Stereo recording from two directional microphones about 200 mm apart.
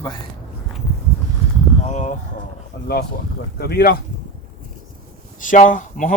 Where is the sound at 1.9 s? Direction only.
40° left (ahead or behind).